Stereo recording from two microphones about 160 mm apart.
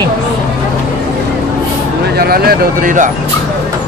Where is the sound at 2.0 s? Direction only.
75° right (ahead or behind); by 3.1 s 55° right (ahead or behind).